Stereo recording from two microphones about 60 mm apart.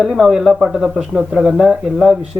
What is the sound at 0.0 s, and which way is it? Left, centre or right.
Speech, centre.